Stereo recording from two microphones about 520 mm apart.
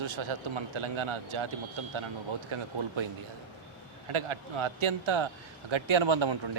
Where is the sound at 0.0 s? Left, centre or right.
Right.